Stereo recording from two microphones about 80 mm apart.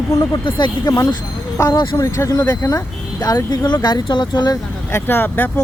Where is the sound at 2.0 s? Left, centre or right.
Left.